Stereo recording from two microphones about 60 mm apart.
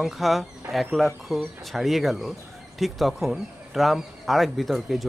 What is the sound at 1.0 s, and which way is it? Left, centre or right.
Speech, centre.